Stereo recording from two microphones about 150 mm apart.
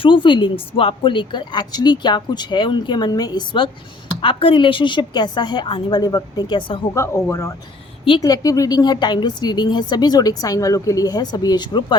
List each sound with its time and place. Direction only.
0.0 s a woman's voice: 35° left (ahead or behind)
6.9 s a woman's voice: 20° left (ahead or behind)